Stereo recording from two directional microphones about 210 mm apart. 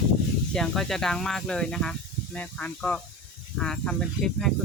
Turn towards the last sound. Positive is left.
turn(degrees=0)  # may be behind; listen again after turning